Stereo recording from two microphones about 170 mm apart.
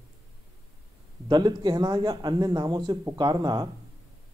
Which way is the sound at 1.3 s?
25° right (ahead or behind).